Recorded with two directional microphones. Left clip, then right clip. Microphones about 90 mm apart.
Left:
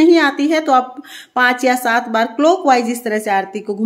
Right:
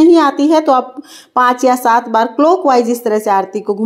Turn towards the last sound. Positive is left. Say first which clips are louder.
# right 4 dB
turn(degrees=-25)  # may be behind; listen again after turning